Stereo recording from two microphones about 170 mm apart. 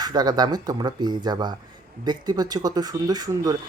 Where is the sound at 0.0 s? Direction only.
25° right (ahead or behind).